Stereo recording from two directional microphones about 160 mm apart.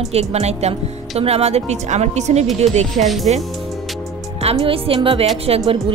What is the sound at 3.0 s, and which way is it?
Speech, centre (ahead or behind).